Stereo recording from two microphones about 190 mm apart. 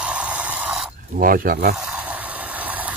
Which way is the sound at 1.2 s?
50° right (ahead or behind).